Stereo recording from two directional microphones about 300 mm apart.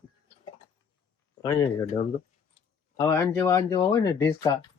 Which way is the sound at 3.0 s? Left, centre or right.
Centre.